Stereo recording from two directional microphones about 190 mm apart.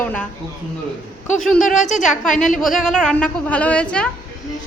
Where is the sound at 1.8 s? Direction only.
40° left (ahead or behind).